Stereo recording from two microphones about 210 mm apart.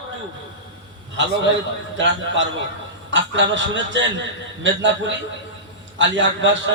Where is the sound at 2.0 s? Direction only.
60° right (ahead or behind).